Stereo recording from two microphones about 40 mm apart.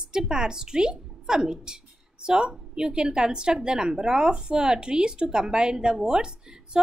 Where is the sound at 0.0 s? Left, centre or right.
Centre.